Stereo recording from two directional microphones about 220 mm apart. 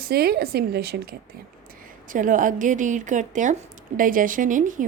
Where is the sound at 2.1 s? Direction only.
35° right (ahead or behind).